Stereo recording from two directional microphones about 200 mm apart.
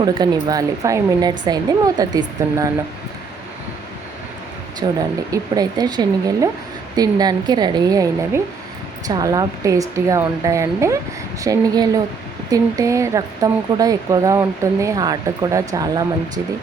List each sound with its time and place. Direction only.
0.0 s speech: 20° right (ahead or behind)
4.8 s speech: 20° right (ahead or behind)